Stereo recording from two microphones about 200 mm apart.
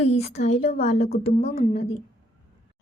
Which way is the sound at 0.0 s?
30° left (ahead or behind).